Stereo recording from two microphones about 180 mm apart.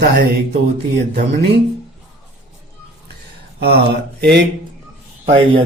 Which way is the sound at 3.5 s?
65° right (ahead or behind).